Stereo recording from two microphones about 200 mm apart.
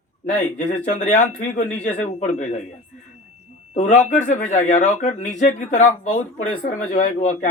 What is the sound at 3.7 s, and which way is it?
Speech, 35° left (ahead or behind).